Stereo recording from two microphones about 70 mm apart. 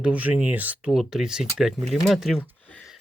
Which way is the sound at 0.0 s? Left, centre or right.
Right.